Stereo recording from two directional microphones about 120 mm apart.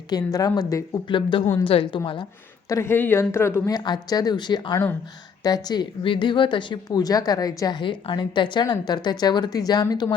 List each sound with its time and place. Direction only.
0.1 s a woman's voice: 30° left (ahead or behind); by 2.0 s 50° left (ahead or behind)
2.6 s speech: 25° left (ahead or behind)
3.8 s a woman's voice: 35° left (ahead or behind)